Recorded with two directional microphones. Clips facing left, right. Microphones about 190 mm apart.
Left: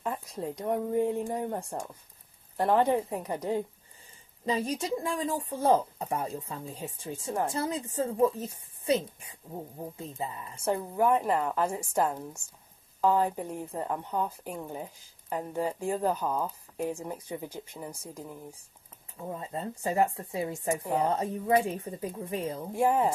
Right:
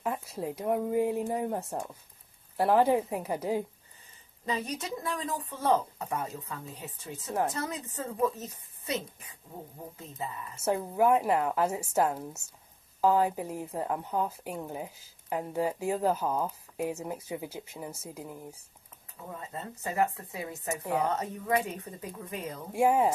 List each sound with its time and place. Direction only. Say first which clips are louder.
0.0 s a woman's voice: right 1 dB; 5° right (ahead or behind)
4.5 s speech: left 4 dB; 30° left (ahead or behind)
10.5 s a woman's voice: right 1 dB; 5° right (ahead or behind)
19.2 s speech: left 5 dB; 30° left (ahead or behind)
22.7 s a woman's voice: right 1 dB; 10° right (ahead or behind)